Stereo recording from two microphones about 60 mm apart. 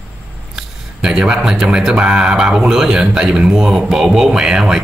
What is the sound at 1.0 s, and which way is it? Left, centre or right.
Speech, centre.